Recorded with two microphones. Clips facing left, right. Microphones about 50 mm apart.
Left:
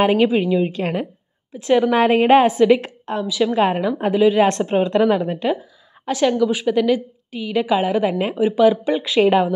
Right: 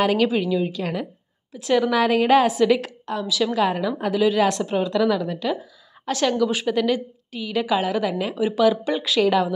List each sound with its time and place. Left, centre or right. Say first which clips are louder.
0.0 s a woman's voice: left 4 dB; left
0.7 s a woman's voice: left 4 dB; left
1.5 s a woman's voice: left 4 dB; left
3.5 s a woman's voice: left 4 dB; left
4.5 s a woman's voice: left 4 dB; left
6.0 s a woman's voice: left 3 dB; centre; by 8.5 s left
8.5 s a woman's voice: left 4 dB; centre
9.2 s a woman's voice: left 4 dB; left